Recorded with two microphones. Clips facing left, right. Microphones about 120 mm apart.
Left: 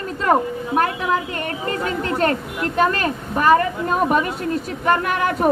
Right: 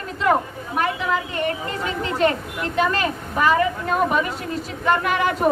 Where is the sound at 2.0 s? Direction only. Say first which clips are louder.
Right 2 dB; 45° left (ahead or behind).